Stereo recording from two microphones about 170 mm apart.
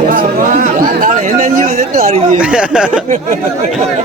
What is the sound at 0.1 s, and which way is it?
Chatter, 50° right (ahead or behind).